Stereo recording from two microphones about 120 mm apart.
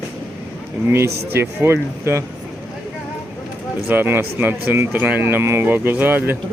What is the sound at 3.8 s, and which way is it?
Speech, 20° right (ahead or behind).